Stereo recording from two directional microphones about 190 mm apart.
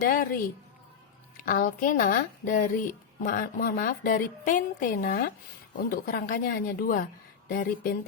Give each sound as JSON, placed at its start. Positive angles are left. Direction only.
{"t": 0.0, "sound": "speech", "side_deg": 45}
{"t": 1.5, "sound": "speech", "side_deg": 45}